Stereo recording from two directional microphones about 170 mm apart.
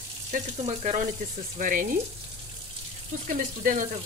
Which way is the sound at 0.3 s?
40° right (ahead or behind).